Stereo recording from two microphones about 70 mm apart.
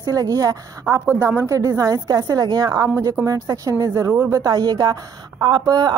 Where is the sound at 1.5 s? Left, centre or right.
Right.